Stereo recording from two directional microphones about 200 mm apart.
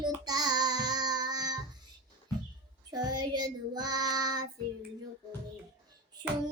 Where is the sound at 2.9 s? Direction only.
20° right (ahead or behind).